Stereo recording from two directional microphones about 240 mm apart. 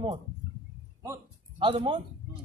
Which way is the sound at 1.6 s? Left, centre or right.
Right.